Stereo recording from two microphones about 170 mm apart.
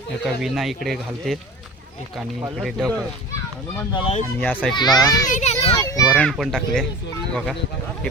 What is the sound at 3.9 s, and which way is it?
Speech, 30° left (ahead or behind).